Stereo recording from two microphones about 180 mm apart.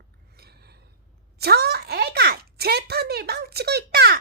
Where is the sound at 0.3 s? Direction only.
60° right (ahead or behind).